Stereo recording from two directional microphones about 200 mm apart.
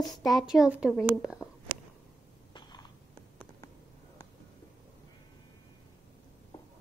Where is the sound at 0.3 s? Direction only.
Centre (ahead or behind).